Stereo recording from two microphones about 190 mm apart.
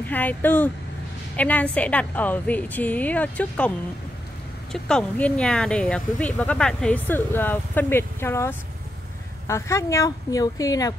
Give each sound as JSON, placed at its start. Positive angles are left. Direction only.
{"t": 0.0, "sound": "speech", "side_deg": 10}
{"t": 4.7, "sound": "speech", "side_deg": 5}